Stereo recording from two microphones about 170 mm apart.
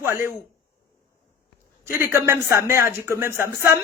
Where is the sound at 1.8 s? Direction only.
15° right (ahead or behind).